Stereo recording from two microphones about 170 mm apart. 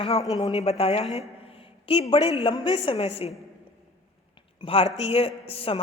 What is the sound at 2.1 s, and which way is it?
A woman's voice, 30° left (ahead or behind).